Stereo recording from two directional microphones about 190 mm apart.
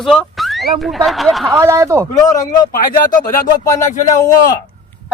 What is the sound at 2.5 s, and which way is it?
Speech, 45° left (ahead or behind).